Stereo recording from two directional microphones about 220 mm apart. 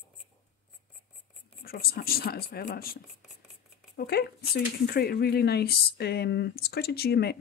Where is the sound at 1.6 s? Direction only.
45° left (ahead or behind).